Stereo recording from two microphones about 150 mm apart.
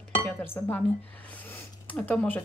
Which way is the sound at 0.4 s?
10° left (ahead or behind).